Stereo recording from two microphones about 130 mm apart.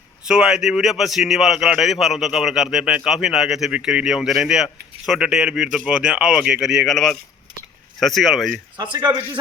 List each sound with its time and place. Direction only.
0.3 s a man's voice: 5° right (ahead or behind)
8.8 s a man's voice: 35° right (ahead or behind)